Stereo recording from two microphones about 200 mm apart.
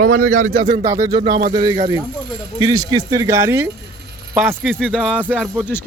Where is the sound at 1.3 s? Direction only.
50° right (ahead or behind).